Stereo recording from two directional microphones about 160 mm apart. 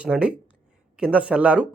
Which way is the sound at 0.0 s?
10° right (ahead or behind).